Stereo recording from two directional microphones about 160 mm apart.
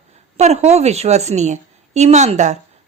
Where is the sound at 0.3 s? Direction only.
45° right (ahead or behind).